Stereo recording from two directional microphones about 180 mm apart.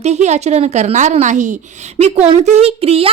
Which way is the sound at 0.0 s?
40° right (ahead or behind).